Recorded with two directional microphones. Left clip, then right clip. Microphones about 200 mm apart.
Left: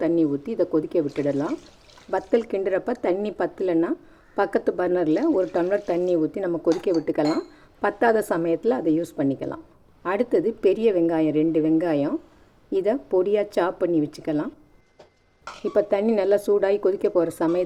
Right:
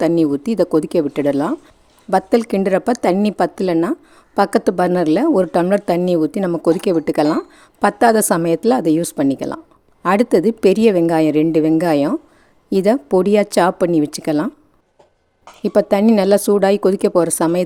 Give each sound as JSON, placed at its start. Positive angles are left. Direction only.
{"t": 0.0, "sound": "speech", "side_deg": -60}
{"t": 15.6, "sound": "speech", "side_deg": -60}